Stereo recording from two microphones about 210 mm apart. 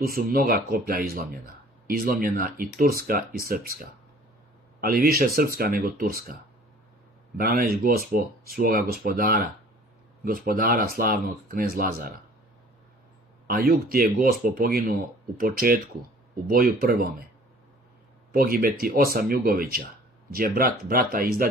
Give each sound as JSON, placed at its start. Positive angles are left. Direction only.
{"t": 0.0, "sound": "speech", "side_deg": -45}
{"t": 7.3, "sound": "speech", "side_deg": -45}
{"t": 13.5, "sound": "speech", "side_deg": -45}
{"t": 18.3, "sound": "speech", "side_deg": -45}